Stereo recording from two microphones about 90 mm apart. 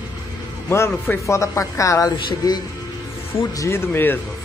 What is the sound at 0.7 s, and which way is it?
Speech, 30° left (ahead or behind).